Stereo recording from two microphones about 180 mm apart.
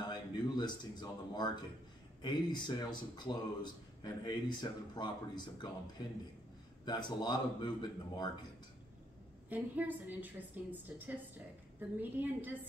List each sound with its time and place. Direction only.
0.0 s a man's voice: 25° left (ahead or behind)
9.5 s a woman's voice: 10° right (ahead or behind)